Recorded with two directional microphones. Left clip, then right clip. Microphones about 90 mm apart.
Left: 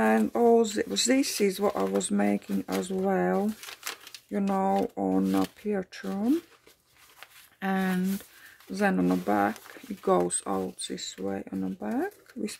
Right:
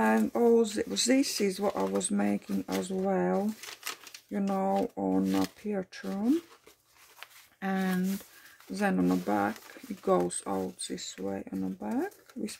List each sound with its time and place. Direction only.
0.3 s speech: 25° left (ahead or behind)
7.6 s speech: 25° left (ahead or behind)